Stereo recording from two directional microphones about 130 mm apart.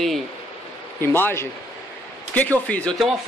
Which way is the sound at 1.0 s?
15° left (ahead or behind).